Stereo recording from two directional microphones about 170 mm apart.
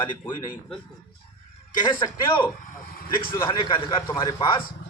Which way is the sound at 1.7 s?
25° left (ahead or behind).